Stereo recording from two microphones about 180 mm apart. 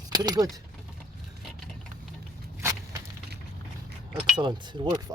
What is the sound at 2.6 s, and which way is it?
Walk, 20° right (ahead or behind).